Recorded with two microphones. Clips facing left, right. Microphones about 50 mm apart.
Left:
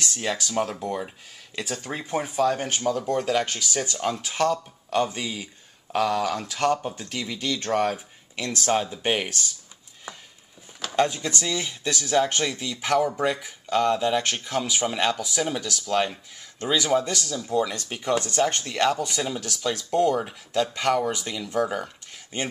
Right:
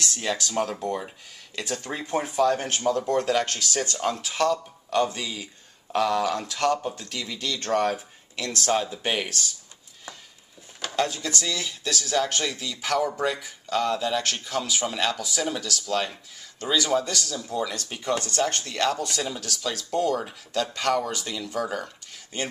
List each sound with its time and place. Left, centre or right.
0.0 s speech: centre
11.0 s speech: centre
17.3 s speech: centre
22.3 s speech: left